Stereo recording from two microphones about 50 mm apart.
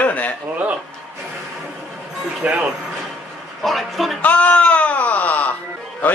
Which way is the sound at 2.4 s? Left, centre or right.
Right.